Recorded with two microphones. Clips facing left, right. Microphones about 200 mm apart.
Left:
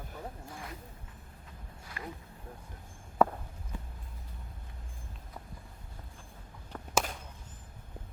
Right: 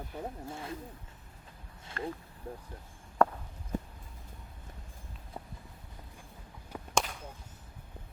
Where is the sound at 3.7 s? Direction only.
45° right (ahead or behind).